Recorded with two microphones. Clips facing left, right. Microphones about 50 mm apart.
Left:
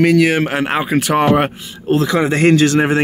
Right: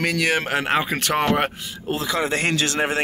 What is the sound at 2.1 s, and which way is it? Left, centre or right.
Speech, centre.